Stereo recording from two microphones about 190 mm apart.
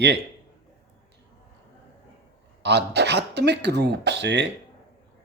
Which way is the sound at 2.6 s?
65° right (ahead or behind).